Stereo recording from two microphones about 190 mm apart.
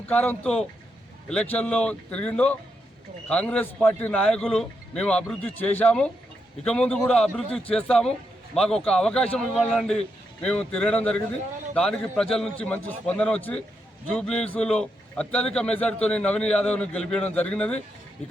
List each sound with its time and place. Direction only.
0.1 s a man's voice: 10° left (ahead or behind)